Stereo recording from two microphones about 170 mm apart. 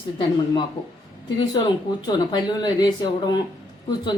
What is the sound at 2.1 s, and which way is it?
Speech, 25° left (ahead or behind).